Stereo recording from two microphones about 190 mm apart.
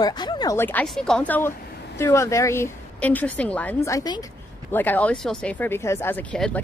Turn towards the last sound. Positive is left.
turn(degrees=5)  # may be behind; listen again after turning